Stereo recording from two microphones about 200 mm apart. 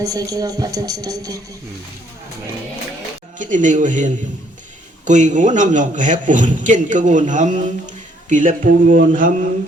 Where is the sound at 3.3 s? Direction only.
40° right (ahead or behind).